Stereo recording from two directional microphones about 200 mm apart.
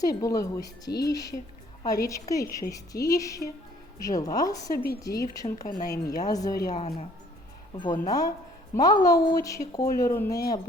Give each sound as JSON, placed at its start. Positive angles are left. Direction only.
{"t": 0.0, "sound": "speech", "side_deg": 20}
{"t": 6.7, "sound": "speech", "side_deg": 30}